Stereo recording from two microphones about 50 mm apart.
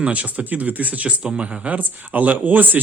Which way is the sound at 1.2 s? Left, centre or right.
Centre.